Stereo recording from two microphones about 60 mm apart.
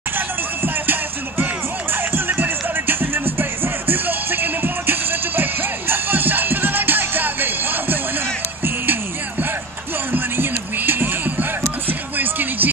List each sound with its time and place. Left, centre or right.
1.4 s music: right
10.1 s music: right